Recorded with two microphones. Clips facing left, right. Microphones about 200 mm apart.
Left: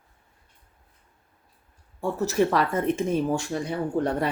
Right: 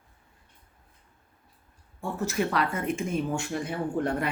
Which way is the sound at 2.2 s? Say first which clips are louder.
Left 5 dB; 40° left (ahead or behind).